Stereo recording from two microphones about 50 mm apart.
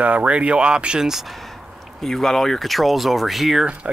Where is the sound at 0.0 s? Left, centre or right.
Right; by 3.6 s centre.